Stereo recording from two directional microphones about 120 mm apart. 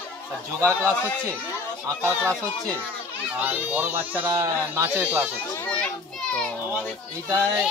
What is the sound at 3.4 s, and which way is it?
Speech, 15° right (ahead or behind).